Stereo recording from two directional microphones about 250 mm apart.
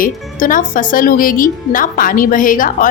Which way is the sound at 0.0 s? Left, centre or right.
Left.